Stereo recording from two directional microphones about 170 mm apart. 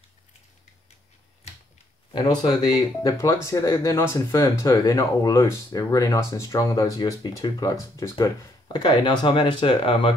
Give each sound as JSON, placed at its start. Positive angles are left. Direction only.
{"t": 2.1, "sound": "speech", "side_deg": 25}